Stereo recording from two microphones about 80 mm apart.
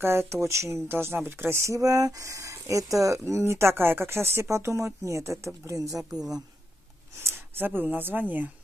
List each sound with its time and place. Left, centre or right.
0.0 s speech: right
6.1 s speech: centre
7.2 s speech: right